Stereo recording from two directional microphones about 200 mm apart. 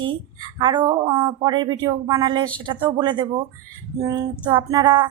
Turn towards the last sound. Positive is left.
turn(degrees=-20)  # may be behind; listen again after turning